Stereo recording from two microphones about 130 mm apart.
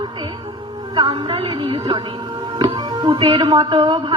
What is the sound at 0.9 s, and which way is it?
Speech, 35° right (ahead or behind).